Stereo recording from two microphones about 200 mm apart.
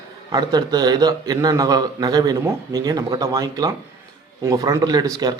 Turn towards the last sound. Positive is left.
turn(degrees=-20)  # may be behind; listen again after turning